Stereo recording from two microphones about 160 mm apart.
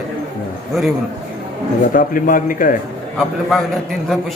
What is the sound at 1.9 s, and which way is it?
Speech, 60° left (ahead or behind).